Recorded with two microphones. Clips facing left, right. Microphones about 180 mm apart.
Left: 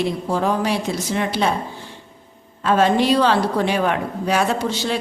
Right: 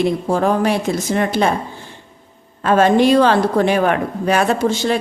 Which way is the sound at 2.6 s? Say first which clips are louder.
Right 4 dB; 50° right (ahead or behind).